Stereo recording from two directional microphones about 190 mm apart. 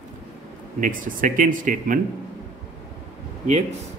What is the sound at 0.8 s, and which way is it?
Speech, 45° right (ahead or behind).